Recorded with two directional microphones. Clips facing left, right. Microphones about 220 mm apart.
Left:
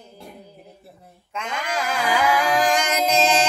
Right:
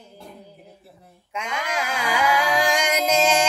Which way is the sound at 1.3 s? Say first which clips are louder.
Even; 10° right (ahead or behind).